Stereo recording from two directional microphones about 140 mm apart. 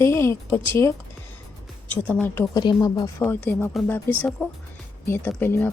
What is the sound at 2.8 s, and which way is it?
Speech, 30° left (ahead or behind).